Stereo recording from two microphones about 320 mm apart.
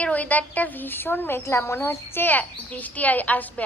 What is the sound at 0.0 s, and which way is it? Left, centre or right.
A woman's voice, centre.